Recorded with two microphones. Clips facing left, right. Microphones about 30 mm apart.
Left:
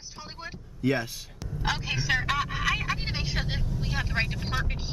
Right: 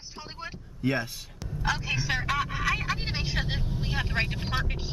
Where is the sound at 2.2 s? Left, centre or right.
Centre.